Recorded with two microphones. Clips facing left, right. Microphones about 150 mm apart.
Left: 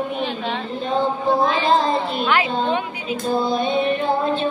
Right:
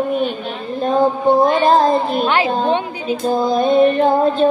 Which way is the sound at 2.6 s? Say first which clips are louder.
Right 4 dB; 35° right (ahead or behind).